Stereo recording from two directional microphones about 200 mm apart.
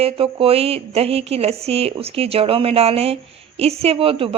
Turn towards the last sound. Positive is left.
turn(degrees=-25)  # may be behind; listen again after turning